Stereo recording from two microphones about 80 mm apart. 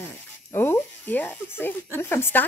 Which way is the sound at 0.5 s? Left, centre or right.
Left.